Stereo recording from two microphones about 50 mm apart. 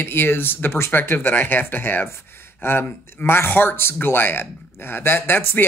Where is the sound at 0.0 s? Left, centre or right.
Left.